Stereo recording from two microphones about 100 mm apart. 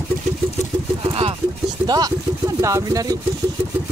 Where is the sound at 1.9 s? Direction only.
40° right (ahead or behind).